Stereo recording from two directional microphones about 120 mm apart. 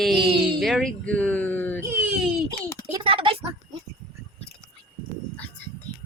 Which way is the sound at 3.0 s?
50° right (ahead or behind).